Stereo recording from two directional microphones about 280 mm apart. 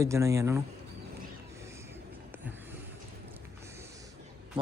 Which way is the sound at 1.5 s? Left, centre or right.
Centre.